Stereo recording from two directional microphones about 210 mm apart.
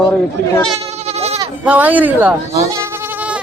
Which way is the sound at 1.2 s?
30° right (ahead or behind).